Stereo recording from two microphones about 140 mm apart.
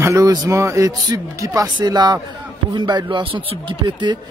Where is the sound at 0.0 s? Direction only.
25° right (ahead or behind).